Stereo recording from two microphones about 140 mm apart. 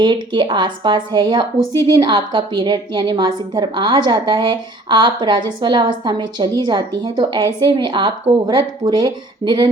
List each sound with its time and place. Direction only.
0.0 s a woman's voice: 35° right (ahead or behind)